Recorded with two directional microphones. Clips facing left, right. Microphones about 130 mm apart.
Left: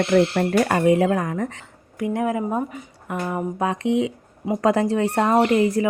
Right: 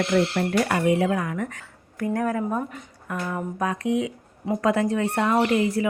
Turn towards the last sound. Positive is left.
turn(degrees=35)  # may be behind; listen again after turning